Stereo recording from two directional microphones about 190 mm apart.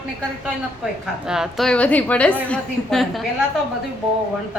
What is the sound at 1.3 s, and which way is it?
A woman's voice, centre (ahead or behind).